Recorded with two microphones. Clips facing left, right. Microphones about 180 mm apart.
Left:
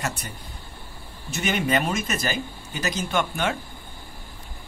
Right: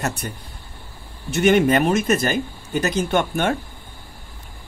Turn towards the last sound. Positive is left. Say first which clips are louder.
# right 5 dB
turn(degrees=-55)  # may be behind; listen again after turning